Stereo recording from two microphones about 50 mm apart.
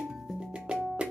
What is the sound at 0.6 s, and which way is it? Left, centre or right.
Music, centre.